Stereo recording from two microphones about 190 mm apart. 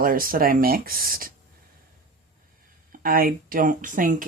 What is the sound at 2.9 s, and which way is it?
Speech, 50° right (ahead or behind).